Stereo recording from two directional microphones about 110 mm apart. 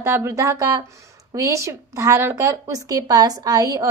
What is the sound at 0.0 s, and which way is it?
A woman's voice, 25° right (ahead or behind).